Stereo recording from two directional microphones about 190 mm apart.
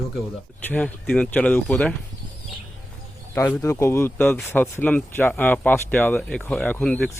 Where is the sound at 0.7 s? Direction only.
5° left (ahead or behind).